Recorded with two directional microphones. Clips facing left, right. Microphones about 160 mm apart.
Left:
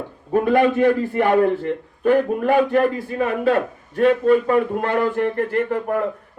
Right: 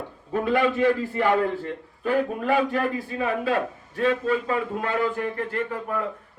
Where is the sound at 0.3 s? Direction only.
55° left (ahead or behind).